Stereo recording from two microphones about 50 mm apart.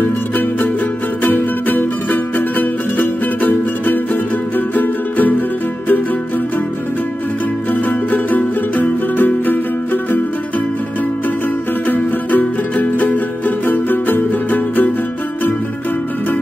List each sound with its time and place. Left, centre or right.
1.2 s music: left
7.7 s music: left
11.8 s music: left